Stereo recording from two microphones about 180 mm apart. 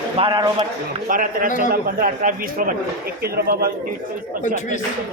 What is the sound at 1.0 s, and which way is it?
A man's voice, 50° right (ahead or behind).